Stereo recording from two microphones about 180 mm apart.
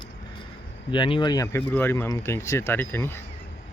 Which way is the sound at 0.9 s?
25° left (ahead or behind).